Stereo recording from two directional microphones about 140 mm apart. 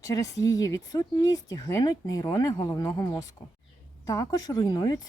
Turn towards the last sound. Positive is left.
turn(degrees=30)  # may be behind; listen again after turning